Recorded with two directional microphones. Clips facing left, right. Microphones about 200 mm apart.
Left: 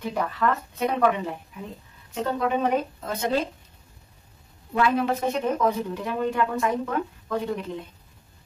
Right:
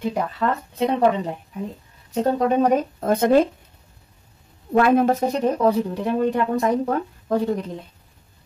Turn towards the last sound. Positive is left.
turn(degrees=-40)  # may be behind; listen again after turning